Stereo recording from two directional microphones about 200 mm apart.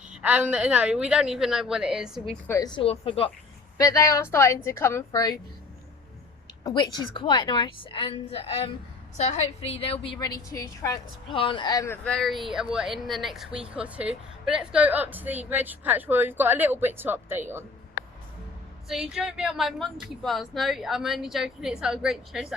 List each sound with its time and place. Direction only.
0.1 s a woman's voice: 5° right (ahead or behind)
2.5 s a woman's voice: 20° left (ahead or behind)
3.8 s a woman's voice: 15° left (ahead or behind)
6.7 s a woman's voice: 20° left (ahead or behind)
12.0 s a woman's voice: centre (ahead or behind)
18.9 s a woman's voice: centre (ahead or behind)